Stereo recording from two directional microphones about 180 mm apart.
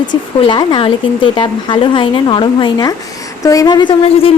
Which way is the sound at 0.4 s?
25° left (ahead or behind).